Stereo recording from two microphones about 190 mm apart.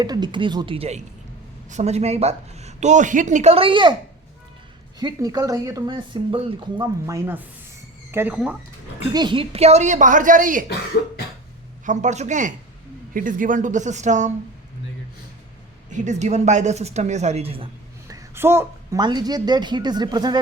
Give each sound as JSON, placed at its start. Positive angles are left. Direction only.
{"t": 0.0, "sound": "a woman's voice", "side_deg": -20}
{"t": 4.9, "sound": "speech", "side_deg": -20}
{"t": 9.1, "sound": "a woman's voice", "side_deg": -25}
{"t": 11.9, "sound": "a woman's voice", "side_deg": -40}
{"t": 15.9, "sound": "a woman's voice", "side_deg": -40}
{"t": 18.1, "sound": "speech", "side_deg": -15}